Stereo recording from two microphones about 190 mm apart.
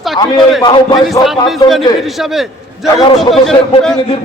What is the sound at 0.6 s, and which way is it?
Speech, 25° left (ahead or behind).